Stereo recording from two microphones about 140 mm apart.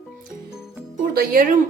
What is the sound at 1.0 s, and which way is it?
Speech, 90° right.